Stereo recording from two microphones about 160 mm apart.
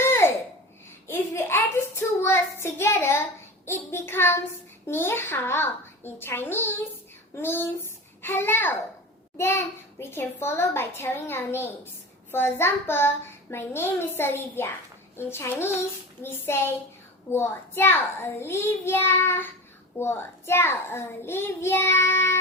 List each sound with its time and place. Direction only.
0.0 s a sound: 15° left (ahead or behind)
1.0 s child singing: 15° left (ahead or behind)
3.7 s a child's voice: 15° left (ahead or behind)